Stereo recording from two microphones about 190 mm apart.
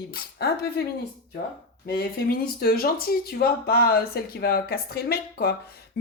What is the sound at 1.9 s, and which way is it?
Speech, 55° left (ahead or behind).